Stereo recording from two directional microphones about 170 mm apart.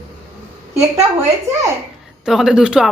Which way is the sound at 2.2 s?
5° right (ahead or behind).